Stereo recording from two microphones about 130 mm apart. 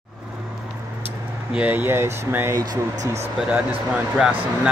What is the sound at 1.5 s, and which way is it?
Speech, 10° right (ahead or behind).